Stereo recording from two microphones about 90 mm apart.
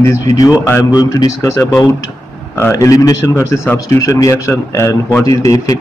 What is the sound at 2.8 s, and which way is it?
Speech, 40° left (ahead or behind).